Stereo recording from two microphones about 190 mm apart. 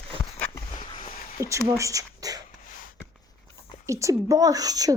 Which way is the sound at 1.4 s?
15° right (ahead or behind).